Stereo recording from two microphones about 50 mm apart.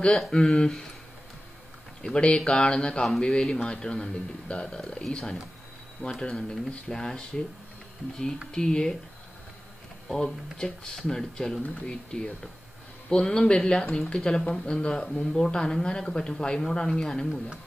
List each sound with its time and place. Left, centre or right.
0.3 s speech: centre
2.1 s speech: centre
8.5 s speech: centre
10.0 s speech: centre